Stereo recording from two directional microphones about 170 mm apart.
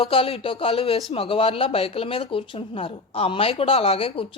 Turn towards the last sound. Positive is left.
turn(degrees=30)  # may be behind; listen again after turning